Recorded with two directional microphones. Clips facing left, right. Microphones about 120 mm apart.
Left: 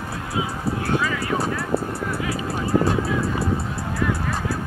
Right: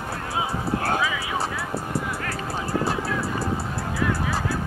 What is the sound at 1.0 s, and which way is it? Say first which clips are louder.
Vehicle: left 3 dB; 5° right (ahead or behind).